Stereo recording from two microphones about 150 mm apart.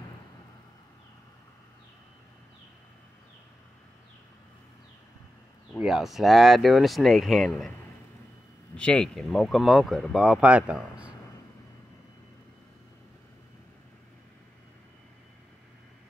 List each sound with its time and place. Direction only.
5.8 s speech: 5° right (ahead or behind)
8.7 s speech: 5° left (ahead or behind)